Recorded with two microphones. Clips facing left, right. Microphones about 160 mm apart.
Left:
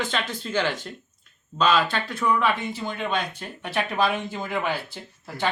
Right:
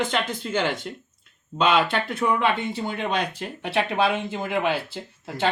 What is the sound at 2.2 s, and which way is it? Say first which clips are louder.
Speech: even; 25° right (ahead or behind).